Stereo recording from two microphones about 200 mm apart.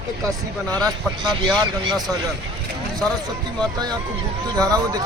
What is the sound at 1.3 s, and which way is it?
Speech, 20° right (ahead or behind).